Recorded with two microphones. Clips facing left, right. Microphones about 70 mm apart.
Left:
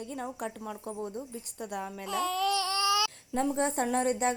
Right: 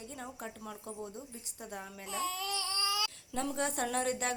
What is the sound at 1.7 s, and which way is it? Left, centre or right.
Baby cry, left.